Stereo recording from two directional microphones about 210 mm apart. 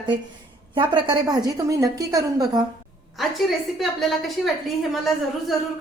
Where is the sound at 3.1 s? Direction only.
Centre (ahead or behind).